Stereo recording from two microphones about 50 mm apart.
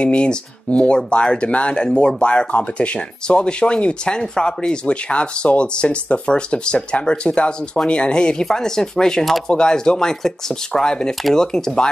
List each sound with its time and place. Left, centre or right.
0.0 s speech: left